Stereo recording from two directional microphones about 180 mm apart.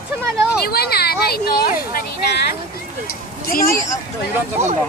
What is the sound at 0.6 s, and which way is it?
Speech, 60° left (ahead or behind).